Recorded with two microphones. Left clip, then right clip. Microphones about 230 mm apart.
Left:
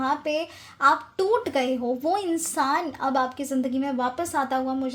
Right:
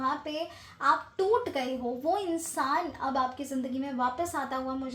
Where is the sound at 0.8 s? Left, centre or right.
Left.